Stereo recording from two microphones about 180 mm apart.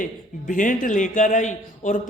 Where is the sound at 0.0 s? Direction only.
45° left (ahead or behind).